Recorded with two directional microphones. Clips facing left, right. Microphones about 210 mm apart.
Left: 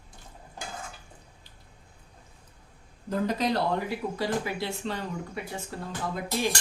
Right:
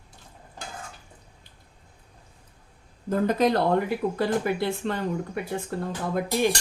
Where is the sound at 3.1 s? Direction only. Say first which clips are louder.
Right 5 dB; 55° right (ahead or behind).